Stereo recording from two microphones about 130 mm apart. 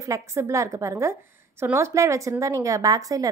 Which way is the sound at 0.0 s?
20° right (ahead or behind).